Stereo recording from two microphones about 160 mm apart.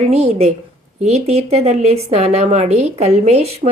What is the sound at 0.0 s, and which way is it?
Speech, 40° right (ahead or behind).